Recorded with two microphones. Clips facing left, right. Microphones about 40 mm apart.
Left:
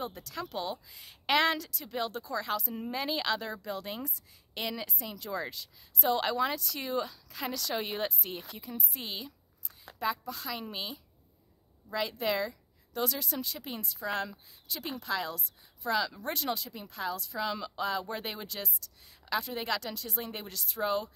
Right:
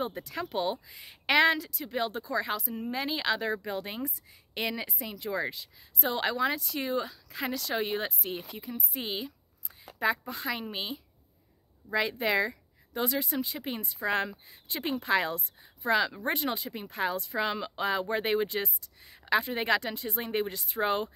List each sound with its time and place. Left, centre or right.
0.0 s speech: right
0.9 s speech: centre
2.7 s a woman's voice: centre
3.3 s speech: right
10.0 s speech: right
20.8 s speech: right